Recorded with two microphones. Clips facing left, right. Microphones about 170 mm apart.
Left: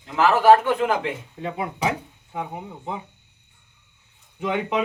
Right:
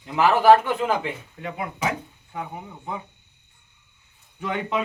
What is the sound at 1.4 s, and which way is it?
Speech, 30° left (ahead or behind).